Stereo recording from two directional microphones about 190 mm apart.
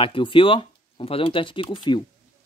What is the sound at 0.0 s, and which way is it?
Speech, 25° left (ahead or behind).